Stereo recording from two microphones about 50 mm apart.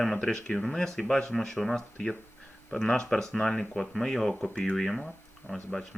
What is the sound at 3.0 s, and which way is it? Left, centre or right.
Speech, centre.